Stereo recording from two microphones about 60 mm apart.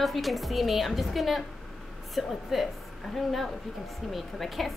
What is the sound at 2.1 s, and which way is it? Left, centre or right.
A woman's voice, centre.